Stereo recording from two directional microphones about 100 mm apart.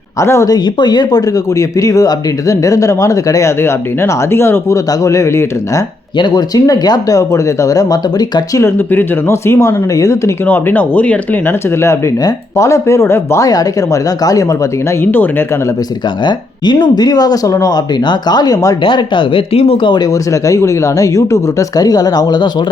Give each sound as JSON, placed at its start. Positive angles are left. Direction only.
{"t": 0.2, "sound": "speech", "side_deg": 30}
{"t": 0.5, "sound": "speech", "side_deg": 45}
{"t": 6.1, "sound": "speech", "side_deg": 40}
{"t": 8.9, "sound": "speech", "side_deg": 25}
{"t": 10.4, "sound": "speech", "side_deg": 20}
{"t": 12.2, "sound": "speech", "side_deg": 30}
{"t": 15.0, "sound": "speech", "side_deg": 20}
{"t": 16.8, "sound": "speech", "side_deg": 45}
{"t": 18.8, "sound": "speech", "side_deg": 55}
{"t": 20.3, "sound": "speech", "side_deg": 30}